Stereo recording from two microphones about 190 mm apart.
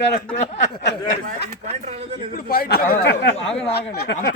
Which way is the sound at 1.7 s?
35° right (ahead or behind).